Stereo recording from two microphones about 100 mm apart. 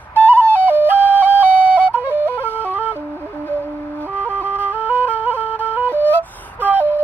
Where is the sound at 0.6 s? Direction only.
20° right (ahead or behind).